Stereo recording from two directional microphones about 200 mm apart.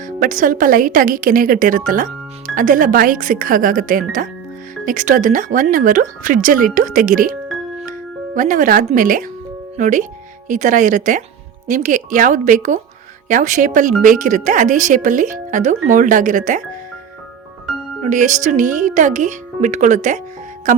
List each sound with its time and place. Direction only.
0.0 s speech: 40° right (ahead or behind)
7.4 s music: centre (ahead or behind)
8.4 s speech: 40° right (ahead or behind)
18.0 s speech: 35° right (ahead or behind)